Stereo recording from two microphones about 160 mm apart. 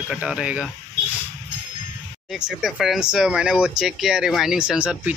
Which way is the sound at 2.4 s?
Centre (ahead or behind).